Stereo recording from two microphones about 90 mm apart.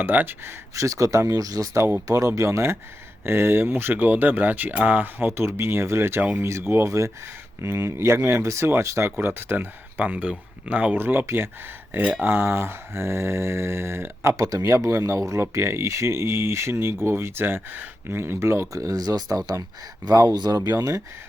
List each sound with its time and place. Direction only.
0.0 s mantra: 20° right (ahead or behind)
0.8 s speech: 35° right (ahead or behind)
3.2 s mantra: 25° right (ahead or behind)
6.4 s speech: 30° right (ahead or behind)
7.6 s mantra: 30° right (ahead or behind)
20.3 s speech: 50° right (ahead or behind)
20.7 s speech: 35° right (ahead or behind)